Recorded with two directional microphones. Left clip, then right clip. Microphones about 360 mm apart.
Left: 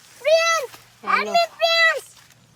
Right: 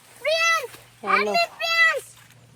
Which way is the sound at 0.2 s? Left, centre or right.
Left.